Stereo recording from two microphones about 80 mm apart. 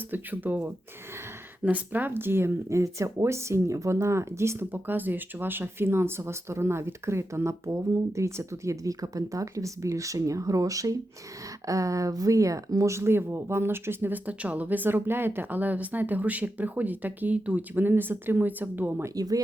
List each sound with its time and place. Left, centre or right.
0.1 s speech: right
1.6 s speech: right
19.1 s speech: right